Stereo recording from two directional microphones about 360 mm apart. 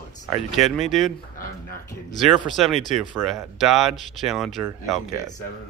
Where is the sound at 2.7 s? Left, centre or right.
Centre.